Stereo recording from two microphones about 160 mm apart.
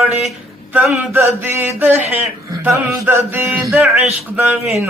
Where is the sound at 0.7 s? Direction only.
10° right (ahead or behind).